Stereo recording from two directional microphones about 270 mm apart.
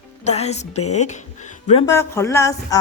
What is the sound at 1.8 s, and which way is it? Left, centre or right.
Speech, centre.